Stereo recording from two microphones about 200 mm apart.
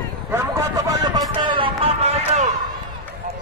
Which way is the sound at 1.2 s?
25° right (ahead or behind).